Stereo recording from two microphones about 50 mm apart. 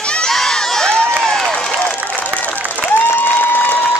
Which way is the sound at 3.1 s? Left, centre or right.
Left.